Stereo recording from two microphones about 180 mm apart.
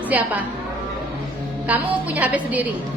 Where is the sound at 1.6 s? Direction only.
10° right (ahead or behind).